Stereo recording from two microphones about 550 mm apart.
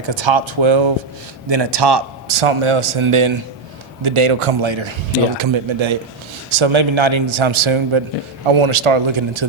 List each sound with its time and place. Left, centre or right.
0.0 s a man's voice: right